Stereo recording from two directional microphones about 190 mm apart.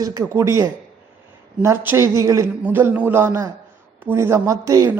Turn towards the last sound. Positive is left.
turn(degrees=-15)  # may be behind; listen again after turning